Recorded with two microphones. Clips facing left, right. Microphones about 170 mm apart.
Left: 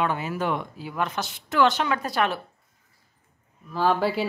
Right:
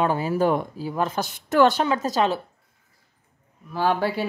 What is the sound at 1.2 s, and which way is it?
Speech, 45° right (ahead or behind).